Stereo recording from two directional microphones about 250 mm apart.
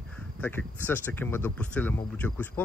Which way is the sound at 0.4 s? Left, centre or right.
Centre.